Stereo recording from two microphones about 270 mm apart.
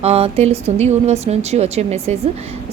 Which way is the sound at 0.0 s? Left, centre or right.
Right.